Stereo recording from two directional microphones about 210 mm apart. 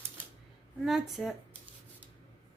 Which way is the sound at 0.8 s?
Centre (ahead or behind).